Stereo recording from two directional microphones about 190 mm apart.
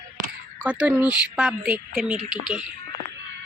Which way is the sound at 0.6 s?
5° right (ahead or behind).